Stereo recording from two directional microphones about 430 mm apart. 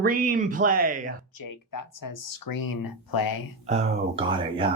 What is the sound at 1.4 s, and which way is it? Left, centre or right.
Speech, left.